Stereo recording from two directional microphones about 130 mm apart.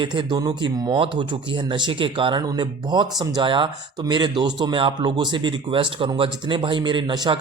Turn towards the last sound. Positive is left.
turn(degrees=-35)  # may be behind; listen again after turning